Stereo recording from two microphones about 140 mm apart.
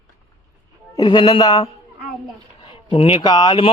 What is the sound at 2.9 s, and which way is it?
Speech, 40° left (ahead or behind).